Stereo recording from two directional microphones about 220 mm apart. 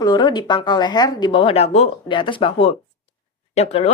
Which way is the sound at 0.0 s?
20° left (ahead or behind).